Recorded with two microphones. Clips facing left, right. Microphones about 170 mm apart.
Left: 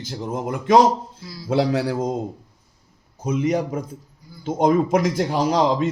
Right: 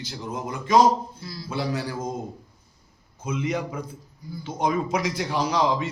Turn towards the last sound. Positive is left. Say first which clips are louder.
# left 4 dB
turn(degrees=50)  # may be behind; listen again after turning